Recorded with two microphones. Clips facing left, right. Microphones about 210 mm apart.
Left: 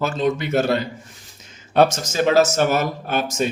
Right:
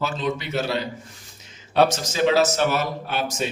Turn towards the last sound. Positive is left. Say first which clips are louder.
# left 4 dB
turn(degrees=45)  # may be behind; listen again after turning